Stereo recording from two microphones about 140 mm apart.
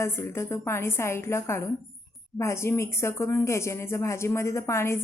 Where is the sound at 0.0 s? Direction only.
20° left (ahead or behind).